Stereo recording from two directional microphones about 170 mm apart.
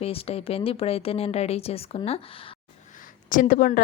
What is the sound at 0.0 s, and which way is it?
Speech, 35° left (ahead or behind).